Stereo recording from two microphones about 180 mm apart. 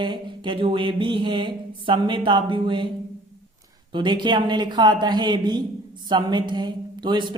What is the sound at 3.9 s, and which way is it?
Mantra, 25° right (ahead or behind).